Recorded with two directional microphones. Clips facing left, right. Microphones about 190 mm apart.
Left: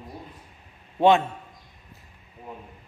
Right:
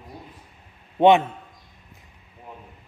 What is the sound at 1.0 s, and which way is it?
Speech, 20° right (ahead or behind).